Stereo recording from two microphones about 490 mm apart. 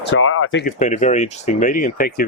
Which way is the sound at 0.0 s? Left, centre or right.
Left.